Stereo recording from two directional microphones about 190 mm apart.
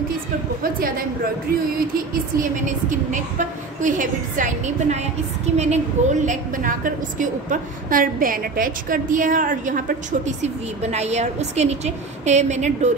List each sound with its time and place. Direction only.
0.7 s a woman's voice: 50° right (ahead or behind)
2.3 s a woman's voice: 40° right (ahead or behind)